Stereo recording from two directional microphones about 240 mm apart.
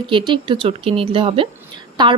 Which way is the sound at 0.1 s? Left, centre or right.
Centre.